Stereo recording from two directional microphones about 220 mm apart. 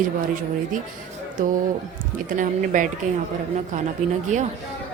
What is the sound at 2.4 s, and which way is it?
Speech, 35° right (ahead or behind).